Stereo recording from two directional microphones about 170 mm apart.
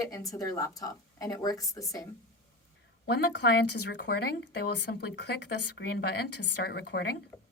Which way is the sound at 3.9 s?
85° left.